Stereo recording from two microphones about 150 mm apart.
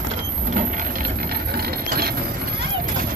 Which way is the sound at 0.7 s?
65° right (ahead or behind).